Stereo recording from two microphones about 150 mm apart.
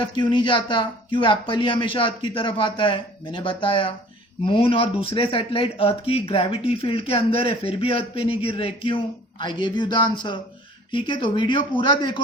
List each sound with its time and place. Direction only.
0.0 s speech: 30° left (ahead or behind)